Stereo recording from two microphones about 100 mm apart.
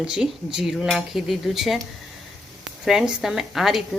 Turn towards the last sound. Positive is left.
turn(degrees=0)  # may be behind; listen again after turning